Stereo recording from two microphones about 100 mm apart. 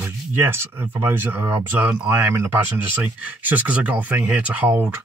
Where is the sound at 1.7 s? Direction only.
15° right (ahead or behind).